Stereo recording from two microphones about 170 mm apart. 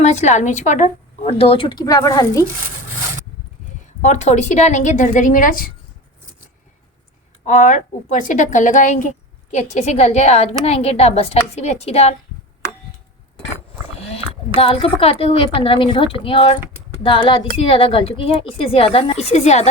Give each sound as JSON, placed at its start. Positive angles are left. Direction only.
{"t": 0.0, "sound": "a woman's voice", "side_deg": 40}
{"t": 4.0, "sound": "a woman's voice", "side_deg": 45}
{"t": 7.4, "sound": "a woman's voice", "side_deg": 45}
{"t": 14.6, "sound": "a woman's voice", "side_deg": 35}